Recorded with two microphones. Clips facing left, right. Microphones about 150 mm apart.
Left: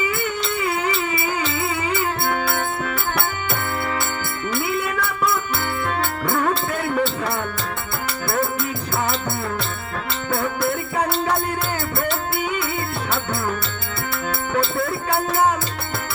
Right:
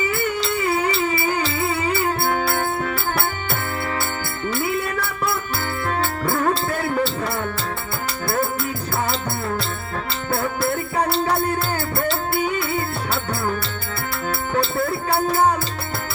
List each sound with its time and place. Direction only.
0.0 s music: 35° right (ahead or behind)
4.6 s music: 40° right (ahead or behind)
10.3 s music: 35° right (ahead or behind)
14.5 s music: 35° right (ahead or behind)